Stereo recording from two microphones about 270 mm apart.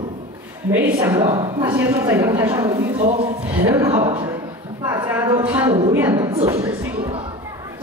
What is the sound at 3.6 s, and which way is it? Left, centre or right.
A woman's voice, centre.